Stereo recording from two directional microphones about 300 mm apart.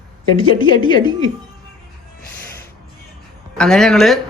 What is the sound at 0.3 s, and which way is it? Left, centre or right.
Speech, centre.